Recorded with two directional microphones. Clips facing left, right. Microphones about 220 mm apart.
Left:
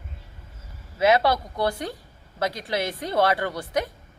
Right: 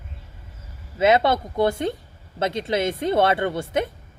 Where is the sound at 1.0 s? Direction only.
20° right (ahead or behind).